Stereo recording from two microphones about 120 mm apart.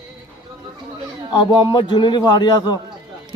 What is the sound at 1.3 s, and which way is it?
A man's voice, 35° left (ahead or behind).